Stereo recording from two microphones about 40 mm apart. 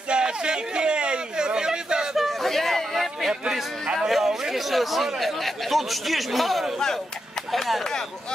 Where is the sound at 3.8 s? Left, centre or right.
Centre.